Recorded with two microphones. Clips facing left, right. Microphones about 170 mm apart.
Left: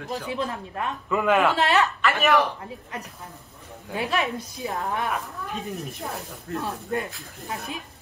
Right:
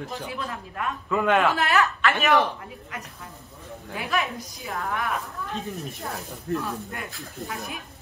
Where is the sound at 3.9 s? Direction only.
30° left (ahead or behind).